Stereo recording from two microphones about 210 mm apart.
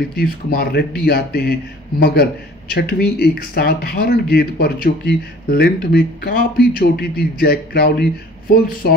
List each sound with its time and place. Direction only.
0.1 s speech: 45° left (ahead or behind)